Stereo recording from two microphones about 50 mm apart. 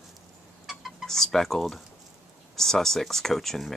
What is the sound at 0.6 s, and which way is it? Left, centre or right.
Chicken, centre.